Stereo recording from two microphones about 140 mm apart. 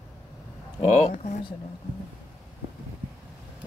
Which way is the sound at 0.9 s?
55° left (ahead or behind).